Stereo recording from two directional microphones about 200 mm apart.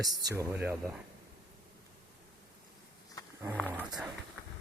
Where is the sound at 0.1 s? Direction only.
20° right (ahead or behind).